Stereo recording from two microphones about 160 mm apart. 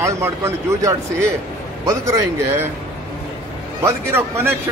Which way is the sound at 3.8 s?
15° right (ahead or behind).